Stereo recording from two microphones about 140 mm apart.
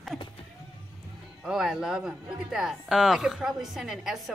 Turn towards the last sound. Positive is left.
turn(degrees=0)  # may be behind; listen again after turning